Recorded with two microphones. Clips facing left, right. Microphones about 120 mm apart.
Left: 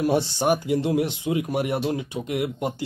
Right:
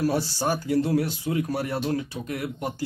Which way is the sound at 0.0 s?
20° left (ahead or behind).